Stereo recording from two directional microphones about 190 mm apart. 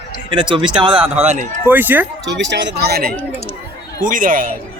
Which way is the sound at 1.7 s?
10° right (ahead or behind).